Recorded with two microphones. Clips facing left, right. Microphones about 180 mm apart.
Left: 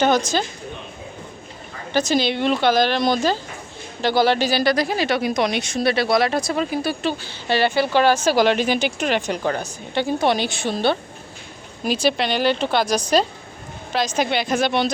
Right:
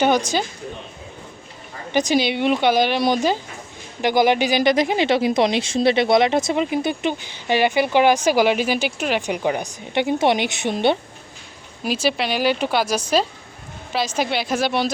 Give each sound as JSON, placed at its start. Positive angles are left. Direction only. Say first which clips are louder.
{"t": 0.0, "sound": "speech", "louder": "even", "side_deg": -10}
{"t": 1.9, "sound": "speech", "louder": "right 1 dB", "side_deg": -15}
{"t": 11.8, "sound": "a woman's voice", "louder": "left 1 dB", "side_deg": -5}